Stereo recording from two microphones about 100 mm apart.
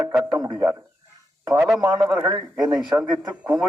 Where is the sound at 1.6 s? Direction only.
10° right (ahead or behind).